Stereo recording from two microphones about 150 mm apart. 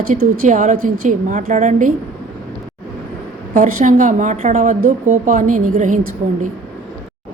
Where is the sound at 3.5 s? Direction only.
55° right (ahead or behind).